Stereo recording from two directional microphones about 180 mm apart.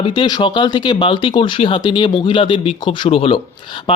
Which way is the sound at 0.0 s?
25° left (ahead or behind).